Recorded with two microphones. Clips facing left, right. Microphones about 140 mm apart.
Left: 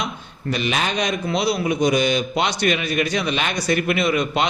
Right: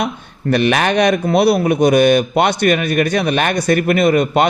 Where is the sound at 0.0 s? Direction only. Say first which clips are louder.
Right 7 dB; 60° right (ahead or behind).